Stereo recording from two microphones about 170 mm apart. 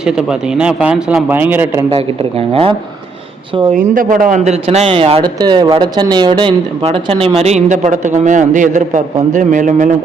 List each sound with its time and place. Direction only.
0.0 s a man's voice: 5° right (ahead or behind)
2.5 s speech: 35° right (ahead or behind)
3.8 s a woman's voice: 55° right (ahead or behind)